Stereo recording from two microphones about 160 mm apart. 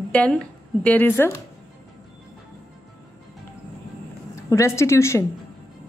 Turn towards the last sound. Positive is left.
turn(degrees=15)  # may be behind; listen again after turning